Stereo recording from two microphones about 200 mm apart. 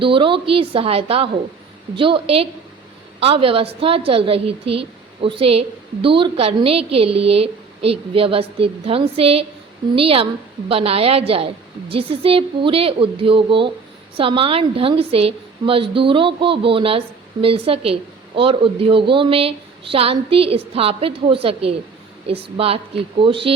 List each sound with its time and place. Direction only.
0.0 s a woman's voice: 25° right (ahead or behind)